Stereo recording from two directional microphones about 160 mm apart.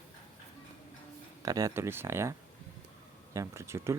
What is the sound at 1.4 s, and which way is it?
Speech, 20° right (ahead or behind).